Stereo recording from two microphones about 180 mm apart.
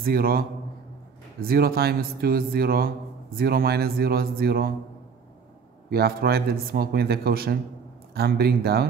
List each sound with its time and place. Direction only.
0.0 s speech: 55° right (ahead or behind)
5.9 s speech: 60° right (ahead or behind)